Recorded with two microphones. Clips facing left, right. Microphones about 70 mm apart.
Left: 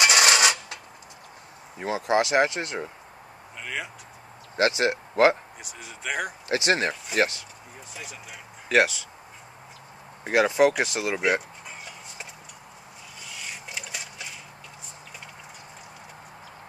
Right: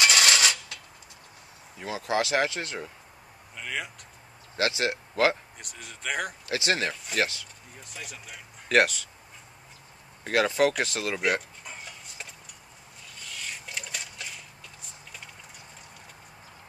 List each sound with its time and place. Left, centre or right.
0.0 s a sound: left
1.8 s speech: left
3.5 s speech: centre
4.6 s speech: left
5.6 s speech: centre
6.5 s speech: left
7.9 s speech: centre
10.2 s speech: centre
13.2 s a sound: centre